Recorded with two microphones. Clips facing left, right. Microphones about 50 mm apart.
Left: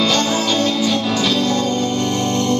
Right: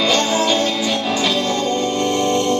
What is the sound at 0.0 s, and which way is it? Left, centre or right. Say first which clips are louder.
Music: right 1 dB; centre.